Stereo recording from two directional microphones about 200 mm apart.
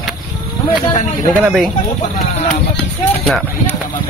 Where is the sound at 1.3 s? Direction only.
5° right (ahead or behind).